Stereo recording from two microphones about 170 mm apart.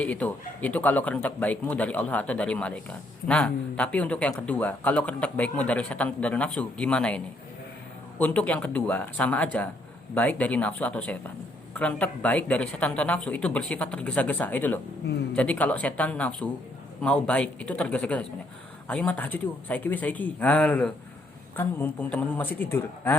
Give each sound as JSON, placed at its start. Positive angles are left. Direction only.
{"t": 0.0, "sound": "speech", "side_deg": 10}
{"t": 8.2, "sound": "speech", "side_deg": 10}
{"t": 15.0, "sound": "speech", "side_deg": 75}
{"t": 15.4, "sound": "speech", "side_deg": 10}